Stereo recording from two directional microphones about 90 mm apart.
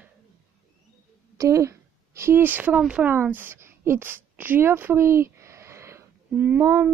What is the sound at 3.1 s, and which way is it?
A woman's voice, 20° right (ahead or behind).